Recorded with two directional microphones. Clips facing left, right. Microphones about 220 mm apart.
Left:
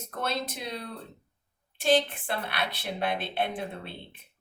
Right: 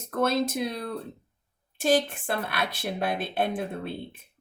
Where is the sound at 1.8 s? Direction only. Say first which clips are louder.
Right 1 dB; 45° right (ahead or behind).